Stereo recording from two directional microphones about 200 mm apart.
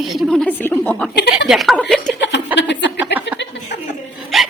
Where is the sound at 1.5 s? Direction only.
Centre (ahead or behind).